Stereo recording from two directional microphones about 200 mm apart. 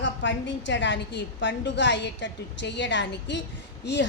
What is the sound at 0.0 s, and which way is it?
A woman's voice, 65° left (ahead or behind).